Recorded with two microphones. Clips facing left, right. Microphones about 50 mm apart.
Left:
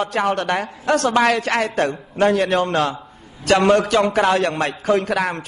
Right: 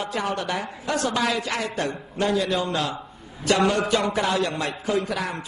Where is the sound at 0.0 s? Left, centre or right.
Left.